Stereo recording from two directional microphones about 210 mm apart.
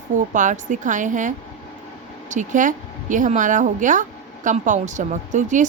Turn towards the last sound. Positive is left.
turn(degrees=-35)  # may be behind; listen again after turning